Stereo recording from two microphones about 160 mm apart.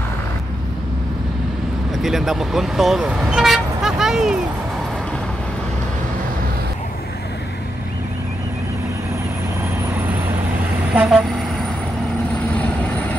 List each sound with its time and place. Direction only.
2.0 s speech: centre (ahead or behind)
9.9 s vehicle: 10° right (ahead or behind)